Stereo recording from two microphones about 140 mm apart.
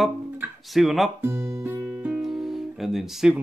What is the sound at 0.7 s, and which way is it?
Speech, centre (ahead or behind).